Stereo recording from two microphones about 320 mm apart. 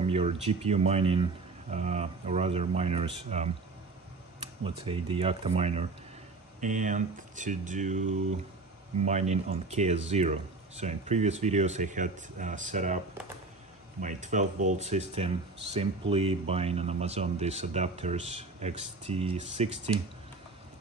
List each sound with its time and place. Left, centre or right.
0.0 s speech: centre
14.0 s speech: right